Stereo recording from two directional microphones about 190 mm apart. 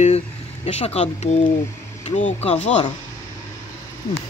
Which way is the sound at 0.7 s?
30° left (ahead or behind).